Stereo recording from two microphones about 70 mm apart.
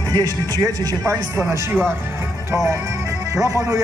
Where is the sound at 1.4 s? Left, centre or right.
Right.